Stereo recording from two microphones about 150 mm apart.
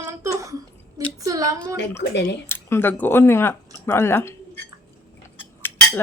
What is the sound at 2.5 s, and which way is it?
Speech, 15° left (ahead or behind).